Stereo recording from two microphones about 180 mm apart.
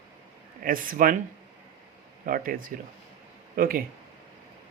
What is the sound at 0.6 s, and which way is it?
Speech, 50° right (ahead or behind).